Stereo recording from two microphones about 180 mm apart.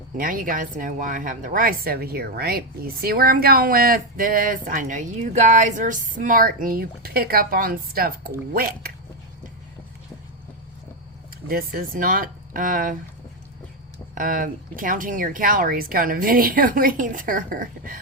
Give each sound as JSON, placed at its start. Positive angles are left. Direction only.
{"t": 0.2, "sound": "speech", "side_deg": -50}
{"t": 11.4, "sound": "speech", "side_deg": -50}
{"t": 14.2, "sound": "speech", "side_deg": -50}